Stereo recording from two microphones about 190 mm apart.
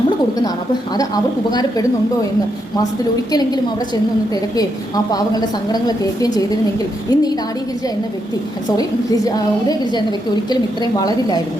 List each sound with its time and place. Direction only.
0.9 s a woman's voice: 20° left (ahead or behind)
5.1 s a woman's voice: 20° left (ahead or behind)
9.0 s a woman's voice: 20° left (ahead or behind)